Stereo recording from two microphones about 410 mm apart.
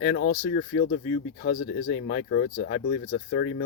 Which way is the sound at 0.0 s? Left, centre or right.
Left.